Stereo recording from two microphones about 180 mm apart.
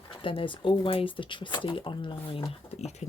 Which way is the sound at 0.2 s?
30° left (ahead or behind).